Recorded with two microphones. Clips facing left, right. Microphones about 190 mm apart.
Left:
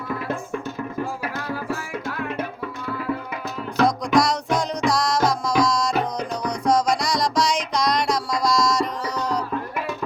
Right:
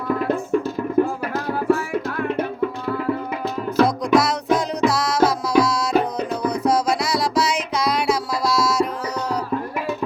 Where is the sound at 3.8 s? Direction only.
5° right (ahead or behind).